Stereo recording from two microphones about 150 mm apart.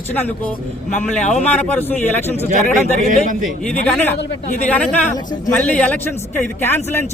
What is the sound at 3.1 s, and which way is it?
Speech, 60° right (ahead or behind).